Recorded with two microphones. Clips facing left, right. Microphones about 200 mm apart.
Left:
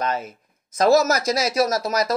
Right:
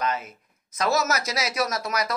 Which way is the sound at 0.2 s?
30° left (ahead or behind).